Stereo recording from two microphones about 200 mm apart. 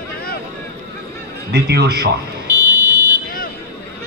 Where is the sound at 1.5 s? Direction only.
55° right (ahead or behind).